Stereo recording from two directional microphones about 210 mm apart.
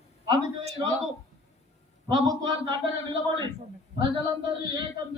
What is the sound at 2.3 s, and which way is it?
A man's voice, 15° right (ahead or behind).